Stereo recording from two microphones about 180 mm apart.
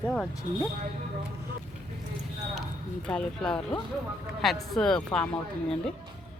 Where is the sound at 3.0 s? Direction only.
5° left (ahead or behind).